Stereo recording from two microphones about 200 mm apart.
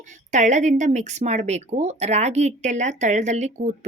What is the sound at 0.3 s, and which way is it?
Speech, 35° right (ahead or behind).